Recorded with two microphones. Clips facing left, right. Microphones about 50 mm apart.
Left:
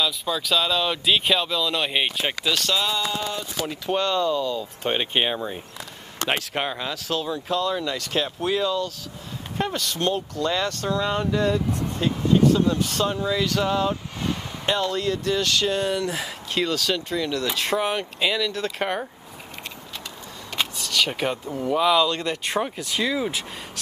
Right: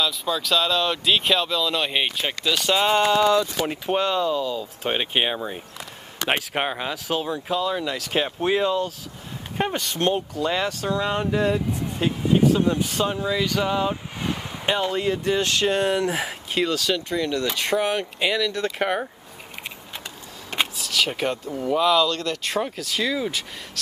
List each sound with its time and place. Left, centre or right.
0.0 s speech: centre
3.1 s speech: right
3.6 s speech: right
3.9 s speech: centre
6.6 s speech: centre
8.2 s speech: right
16.1 s speech: right
16.5 s speech: centre
20.7 s speech: centre